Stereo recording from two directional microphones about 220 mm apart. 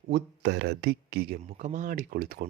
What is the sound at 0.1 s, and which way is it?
Speech, 55° right (ahead or behind).